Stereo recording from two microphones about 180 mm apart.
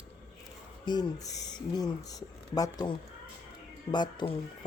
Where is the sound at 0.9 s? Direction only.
20° left (ahead or behind).